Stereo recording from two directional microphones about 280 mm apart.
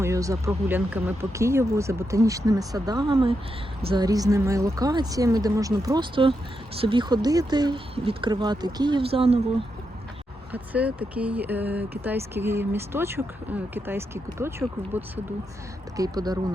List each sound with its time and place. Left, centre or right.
0.0 s speech: centre
10.5 s speech: centre